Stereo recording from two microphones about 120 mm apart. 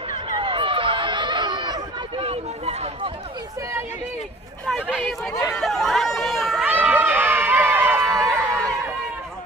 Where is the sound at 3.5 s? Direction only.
25° right (ahead or behind).